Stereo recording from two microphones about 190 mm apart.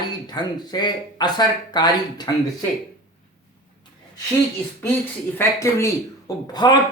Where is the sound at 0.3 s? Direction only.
20° left (ahead or behind).